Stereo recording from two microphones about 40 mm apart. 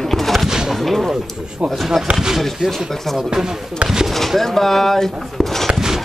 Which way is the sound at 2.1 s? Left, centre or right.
Centre.